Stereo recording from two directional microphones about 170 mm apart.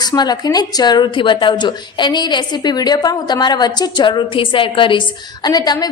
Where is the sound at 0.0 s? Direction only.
25° left (ahead or behind).